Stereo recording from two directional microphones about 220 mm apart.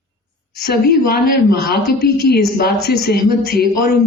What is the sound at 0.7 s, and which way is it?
A woman's voice, 45° left (ahead or behind).